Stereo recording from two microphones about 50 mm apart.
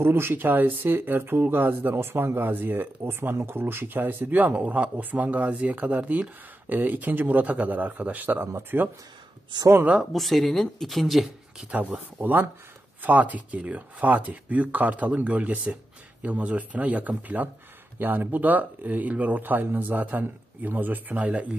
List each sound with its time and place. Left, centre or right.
0.0 s speech: right
2.0 s speech: right
10.1 s speech: centre
11.7 s speech: right
21.3 s speech: right